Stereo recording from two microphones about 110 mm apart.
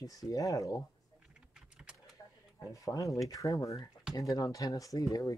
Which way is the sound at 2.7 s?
30° left (ahead or behind).